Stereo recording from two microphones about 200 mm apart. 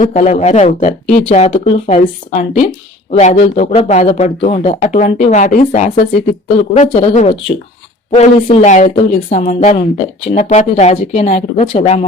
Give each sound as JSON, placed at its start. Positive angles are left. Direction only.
{"t": 0.0, "sound": "speech", "side_deg": 35}